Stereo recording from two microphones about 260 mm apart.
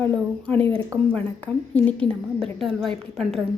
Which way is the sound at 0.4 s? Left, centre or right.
Centre.